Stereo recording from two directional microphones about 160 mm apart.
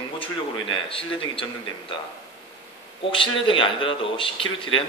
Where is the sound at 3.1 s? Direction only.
30° left (ahead or behind).